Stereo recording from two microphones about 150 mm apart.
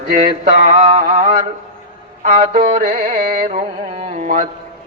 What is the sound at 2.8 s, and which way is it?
Music, 35° right (ahead or behind).